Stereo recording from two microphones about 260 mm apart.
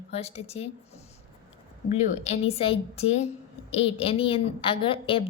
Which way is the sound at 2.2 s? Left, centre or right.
Left.